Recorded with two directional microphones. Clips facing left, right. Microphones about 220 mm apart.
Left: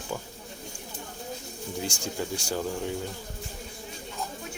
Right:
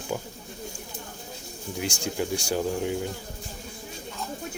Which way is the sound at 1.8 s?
15° right (ahead or behind).